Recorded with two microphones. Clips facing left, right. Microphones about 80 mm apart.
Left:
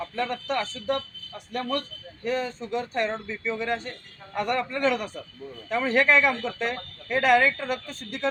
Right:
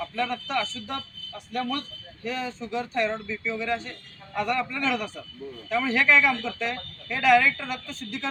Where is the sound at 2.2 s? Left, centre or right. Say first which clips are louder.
Left 3 dB; left.